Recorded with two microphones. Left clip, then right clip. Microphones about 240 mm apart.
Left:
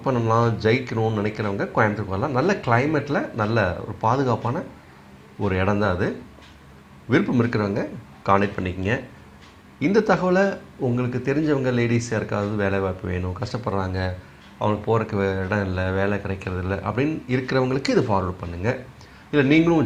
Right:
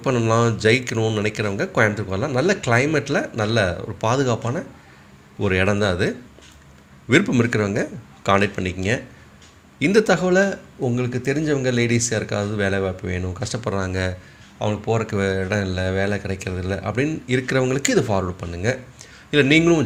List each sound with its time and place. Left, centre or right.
0.0 s speech: right